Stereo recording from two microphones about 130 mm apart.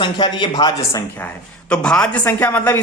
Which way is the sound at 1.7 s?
5° left (ahead or behind).